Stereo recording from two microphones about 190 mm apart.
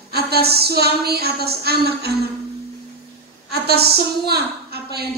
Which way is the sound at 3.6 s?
55° right (ahead or behind).